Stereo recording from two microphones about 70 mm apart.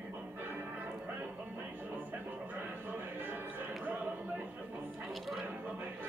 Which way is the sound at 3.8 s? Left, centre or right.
Right.